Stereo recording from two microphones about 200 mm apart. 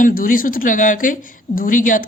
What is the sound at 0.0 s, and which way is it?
A woman's voice, 45° left (ahead or behind).